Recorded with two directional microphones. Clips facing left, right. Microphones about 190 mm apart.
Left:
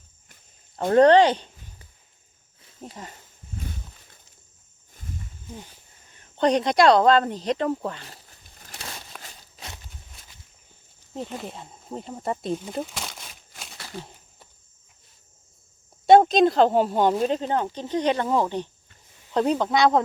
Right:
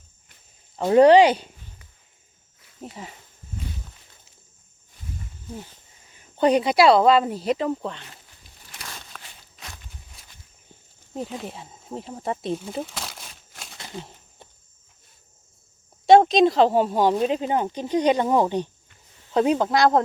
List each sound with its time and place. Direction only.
0.8 s speech: 10° right (ahead or behind)
2.8 s speech: 5° right (ahead or behind)
6.1 s speech: 5° right (ahead or behind)
9.1 s a sound: 10° left (ahead or behind)
11.1 s speech: 5° right (ahead or behind)
13.7 s a sound: 20° right (ahead or behind)
16.0 s speech: centre (ahead or behind)